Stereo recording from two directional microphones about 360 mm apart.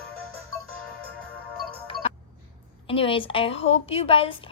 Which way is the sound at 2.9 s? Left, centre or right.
Centre.